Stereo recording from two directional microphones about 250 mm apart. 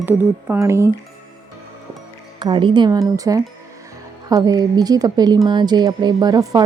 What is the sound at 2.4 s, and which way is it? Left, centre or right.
A woman's voice, centre.